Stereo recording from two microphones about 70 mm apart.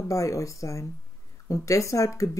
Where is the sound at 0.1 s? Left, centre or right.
Left.